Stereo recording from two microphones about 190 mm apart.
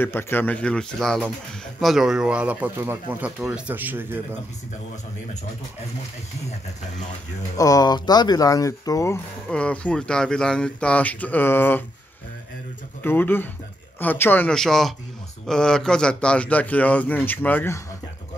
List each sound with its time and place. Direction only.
0.0 s a man's voice: 10° left (ahead or behind); by 4.2 s 10° right (ahead or behind)
7.5 s speech: 20° left (ahead or behind)
9.5 s a man's voice: 5° left (ahead or behind)
13.0 s a man's voice: 10° left (ahead or behind)